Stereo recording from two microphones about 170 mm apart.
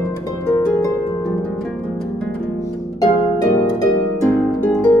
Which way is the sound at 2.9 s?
20° left (ahead or behind).